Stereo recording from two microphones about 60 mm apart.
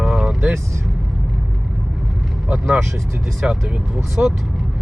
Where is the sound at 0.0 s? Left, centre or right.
Centre.